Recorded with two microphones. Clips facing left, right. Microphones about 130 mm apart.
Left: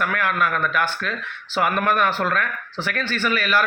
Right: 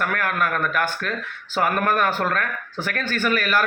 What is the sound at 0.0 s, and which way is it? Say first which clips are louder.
Speech: left 1 dB; 45° right (ahead or behind).